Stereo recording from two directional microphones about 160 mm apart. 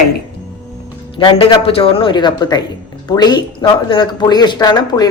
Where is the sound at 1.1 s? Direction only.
35° left (ahead or behind).